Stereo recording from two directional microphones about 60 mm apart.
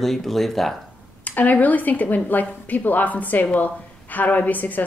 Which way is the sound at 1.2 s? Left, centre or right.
Left.